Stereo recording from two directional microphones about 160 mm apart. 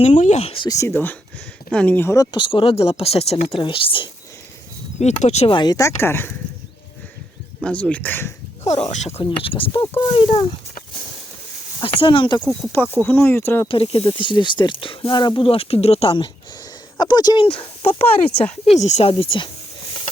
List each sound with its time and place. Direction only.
0.0 s speech: 45° left (ahead or behind)
0.7 s speech: 20° left (ahead or behind)
2.3 s speech: 35° left (ahead or behind)
4.9 s speech: 45° left (ahead or behind)
5.5 s speech: 25° left (ahead or behind)
7.6 s speech: 10° left (ahead or behind)
8.6 s speech: 45° left (ahead or behind)
9.8 s speech: 25° left (ahead or behind)
11.8 s speech: 30° left (ahead or behind)
12.4 s speech: centre (ahead or behind)
13.0 s speech: 15° left (ahead or behind)
13.7 s speech: 35° left (ahead or behind)